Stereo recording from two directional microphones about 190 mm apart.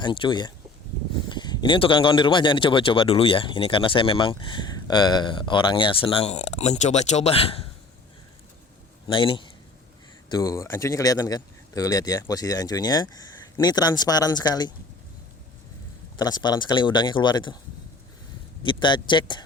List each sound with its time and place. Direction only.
0.0 s speech: 25° left (ahead or behind)
9.0 s a man's voice: 25° left (ahead or behind)
16.1 s speech: 20° left (ahead or behind)
18.6 s speech: 25° left (ahead or behind)